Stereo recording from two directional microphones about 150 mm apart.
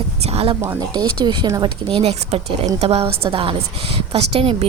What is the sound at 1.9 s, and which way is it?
Speech, 40° right (ahead or behind).